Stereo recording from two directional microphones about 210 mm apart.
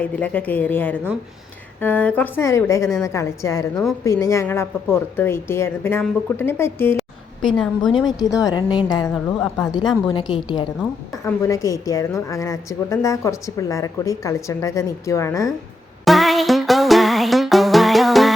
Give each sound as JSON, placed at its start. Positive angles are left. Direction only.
{"t": 0.0, "sound": "a woman's voice", "side_deg": 5}
{"t": 8.8, "sound": "a woman's voice", "side_deg": 20}
{"t": 9.0, "sound": "a woman's voice", "side_deg": 5}
{"t": 10.2, "sound": "a woman's voice", "side_deg": 20}
{"t": 16.0, "sound": "music", "side_deg": 0}